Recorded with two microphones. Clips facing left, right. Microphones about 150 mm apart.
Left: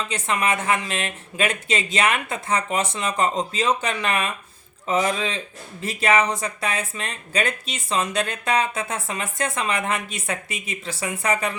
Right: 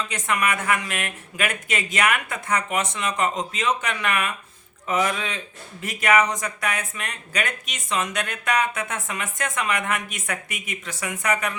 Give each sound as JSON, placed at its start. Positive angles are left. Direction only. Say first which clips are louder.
{"t": 0.1, "sound": "speech", "louder": "left 2 dB", "side_deg": 25}